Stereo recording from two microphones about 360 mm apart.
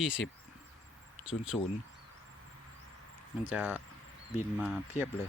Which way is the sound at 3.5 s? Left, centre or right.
Centre.